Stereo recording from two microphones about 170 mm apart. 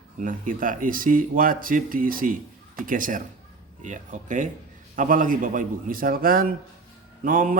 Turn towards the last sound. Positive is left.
turn(degrees=-55)  # may be behind; listen again after turning